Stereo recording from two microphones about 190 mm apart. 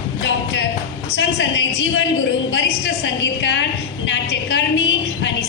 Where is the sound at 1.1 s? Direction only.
70° left (ahead or behind).